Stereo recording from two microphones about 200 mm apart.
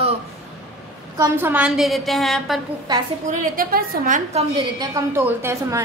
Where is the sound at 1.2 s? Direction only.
10° right (ahead or behind).